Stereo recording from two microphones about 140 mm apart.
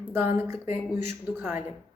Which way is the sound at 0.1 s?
15° right (ahead or behind).